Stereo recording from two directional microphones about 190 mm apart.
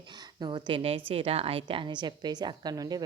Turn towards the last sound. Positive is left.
turn(degrees=-20)  # may be behind; listen again after turning